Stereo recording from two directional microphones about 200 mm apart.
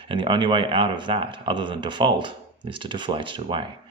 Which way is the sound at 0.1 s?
25° right (ahead or behind).